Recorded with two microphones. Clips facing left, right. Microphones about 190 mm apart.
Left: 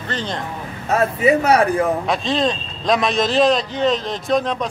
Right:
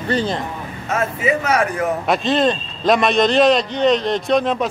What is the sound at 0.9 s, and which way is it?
Speech, 35° left (ahead or behind).